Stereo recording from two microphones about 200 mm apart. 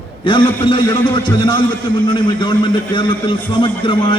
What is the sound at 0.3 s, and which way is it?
A man's voice, 25° left (ahead or behind).